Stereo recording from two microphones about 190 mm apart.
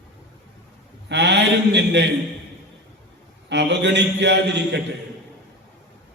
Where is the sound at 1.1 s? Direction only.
65° right (ahead or behind).